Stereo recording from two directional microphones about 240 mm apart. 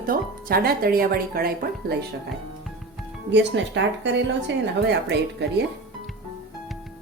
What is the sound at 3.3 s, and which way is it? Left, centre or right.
Speech, right.